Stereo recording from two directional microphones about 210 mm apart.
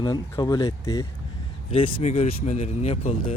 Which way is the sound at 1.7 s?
30° left (ahead or behind).